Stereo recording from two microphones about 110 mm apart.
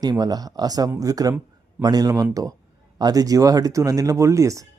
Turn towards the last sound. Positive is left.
turn(degrees=-30)  # may be behind; listen again after turning